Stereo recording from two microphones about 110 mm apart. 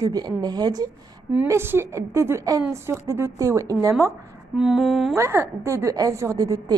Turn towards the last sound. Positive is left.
turn(degrees=-30)  # may be behind; listen again after turning